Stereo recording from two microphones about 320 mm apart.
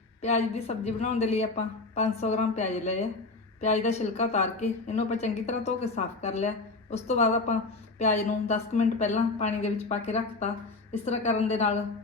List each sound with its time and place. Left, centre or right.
0.2 s a woman's voice: centre